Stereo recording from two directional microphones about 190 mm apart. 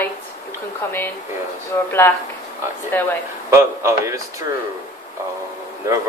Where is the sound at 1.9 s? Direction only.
10° left (ahead or behind).